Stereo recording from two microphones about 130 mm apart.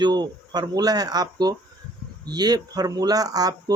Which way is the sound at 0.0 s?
35° right (ahead or behind).